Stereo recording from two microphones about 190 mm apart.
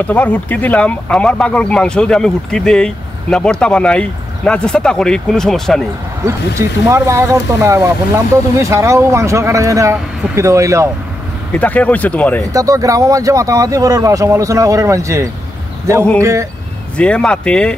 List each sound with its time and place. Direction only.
0.0 s speech: 10° left (ahead or behind)
6.9 s speech: 15° right (ahead or behind)
11.5 s speech: 5° left (ahead or behind)
12.5 s speech: 15° right (ahead or behind)
16.9 s speech: 5° left (ahead or behind)